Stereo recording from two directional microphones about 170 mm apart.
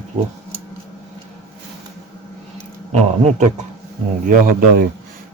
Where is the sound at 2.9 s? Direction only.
45° right (ahead or behind).